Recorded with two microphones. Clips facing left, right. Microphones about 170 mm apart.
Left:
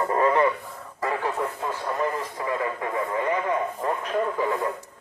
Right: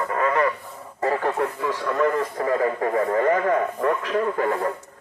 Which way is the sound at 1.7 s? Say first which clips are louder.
Right 7 dB; 75° right (ahead or behind).